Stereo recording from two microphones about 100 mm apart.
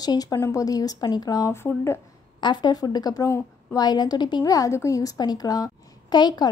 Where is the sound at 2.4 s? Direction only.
50° left (ahead or behind).